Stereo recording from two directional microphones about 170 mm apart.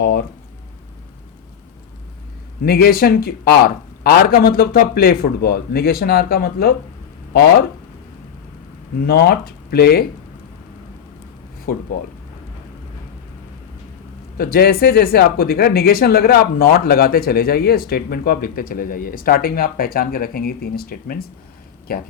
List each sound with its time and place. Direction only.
0.0 s speech: 65° left (ahead or behind)
2.6 s speech: 60° left (ahead or behind)
9.0 s speech: 65° left (ahead or behind)
11.7 s speech: 60° left (ahead or behind)
14.3 s speech: 60° left (ahead or behind)